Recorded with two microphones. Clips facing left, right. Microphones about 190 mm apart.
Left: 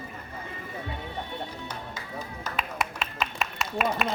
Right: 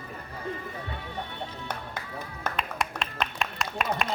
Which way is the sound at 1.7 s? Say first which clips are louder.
Right 3 dB; 60° right (ahead or behind).